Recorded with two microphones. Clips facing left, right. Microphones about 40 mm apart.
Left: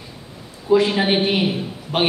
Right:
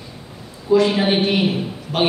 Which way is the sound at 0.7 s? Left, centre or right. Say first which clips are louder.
Right 1 dB; left.